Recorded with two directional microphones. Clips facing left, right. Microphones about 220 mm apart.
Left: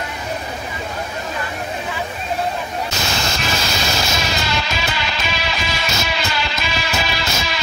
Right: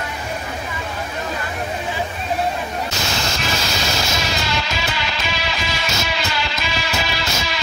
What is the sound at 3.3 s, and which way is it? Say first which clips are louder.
Music: left 1 dB; 55° left (ahead or behind).